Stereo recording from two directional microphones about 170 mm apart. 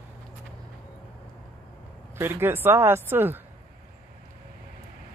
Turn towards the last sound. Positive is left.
turn(degrees=-15)  # may be behind; listen again after turning